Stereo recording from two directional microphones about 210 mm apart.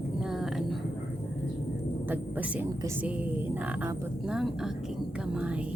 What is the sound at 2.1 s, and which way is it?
Speech, 10° right (ahead or behind).